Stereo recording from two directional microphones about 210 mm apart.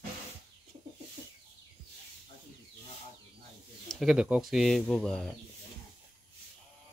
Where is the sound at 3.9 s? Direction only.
Centre (ahead or behind).